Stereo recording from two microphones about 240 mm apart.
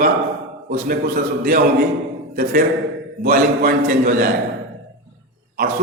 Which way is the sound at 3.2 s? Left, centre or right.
Right.